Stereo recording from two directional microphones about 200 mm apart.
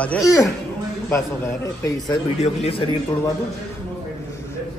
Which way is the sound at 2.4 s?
30° left (ahead or behind).